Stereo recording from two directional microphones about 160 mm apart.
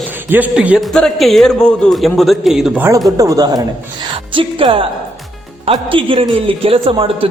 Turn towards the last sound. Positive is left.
turn(degrees=-35)  # may be behind; listen again after turning